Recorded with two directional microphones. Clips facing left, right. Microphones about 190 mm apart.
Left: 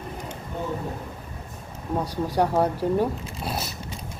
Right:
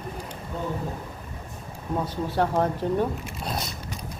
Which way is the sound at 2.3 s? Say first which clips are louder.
Left 2 dB; 10° left (ahead or behind).